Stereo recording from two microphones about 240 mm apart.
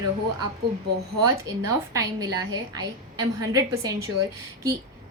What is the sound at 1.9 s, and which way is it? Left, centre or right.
A woman's voice, centre.